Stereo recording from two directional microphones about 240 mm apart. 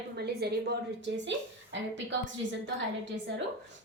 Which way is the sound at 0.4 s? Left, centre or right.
Right.